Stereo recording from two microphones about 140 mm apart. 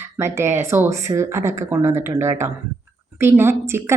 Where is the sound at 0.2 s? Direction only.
20° right (ahead or behind).